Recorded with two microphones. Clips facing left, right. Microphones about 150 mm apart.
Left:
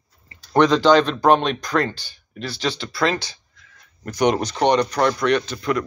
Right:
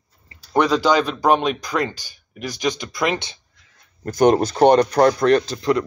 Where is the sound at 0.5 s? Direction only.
10° right (ahead or behind); by 3.4 s 25° right (ahead or behind).